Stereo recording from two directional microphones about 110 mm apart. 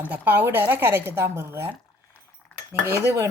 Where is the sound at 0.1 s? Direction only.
20° right (ahead or behind).